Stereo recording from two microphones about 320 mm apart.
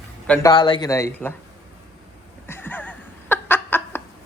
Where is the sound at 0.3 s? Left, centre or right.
Centre.